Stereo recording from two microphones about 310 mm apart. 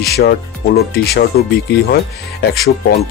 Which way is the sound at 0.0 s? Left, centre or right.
Left.